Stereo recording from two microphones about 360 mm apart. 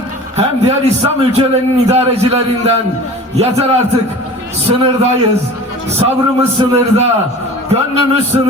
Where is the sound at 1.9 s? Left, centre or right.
Centre.